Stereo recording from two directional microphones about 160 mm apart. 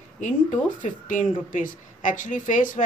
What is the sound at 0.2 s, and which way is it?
Speech, 50° left (ahead or behind).